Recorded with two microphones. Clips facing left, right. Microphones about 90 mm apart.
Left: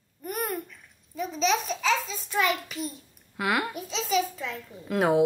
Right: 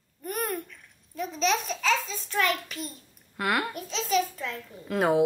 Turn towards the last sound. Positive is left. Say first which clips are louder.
# left 1 dB
turn(degrees=0)  # may be behind; listen again after turning